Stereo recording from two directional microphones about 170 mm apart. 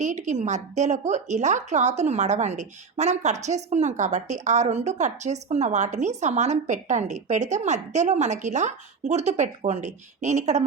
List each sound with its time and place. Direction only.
0.0 s a woman's voice: 45° right (ahead or behind)